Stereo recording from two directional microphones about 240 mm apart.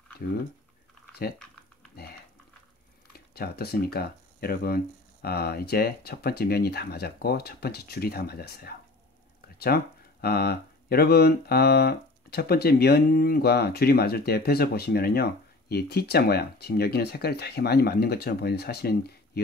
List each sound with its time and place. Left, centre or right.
3.1 s speech: left